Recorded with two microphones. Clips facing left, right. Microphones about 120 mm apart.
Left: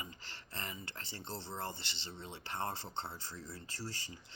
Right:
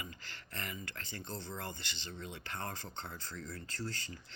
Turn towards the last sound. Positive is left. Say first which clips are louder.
# right 3 dB
turn(degrees=25)  # may be behind; listen again after turning